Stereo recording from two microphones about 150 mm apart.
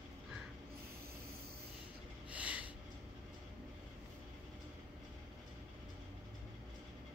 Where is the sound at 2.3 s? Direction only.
10° right (ahead or behind).